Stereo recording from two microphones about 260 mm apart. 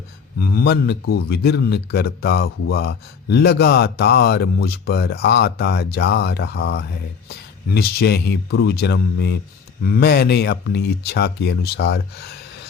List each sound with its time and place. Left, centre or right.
0.3 s speech: left